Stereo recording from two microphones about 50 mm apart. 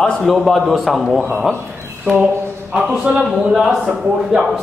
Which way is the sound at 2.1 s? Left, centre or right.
Right.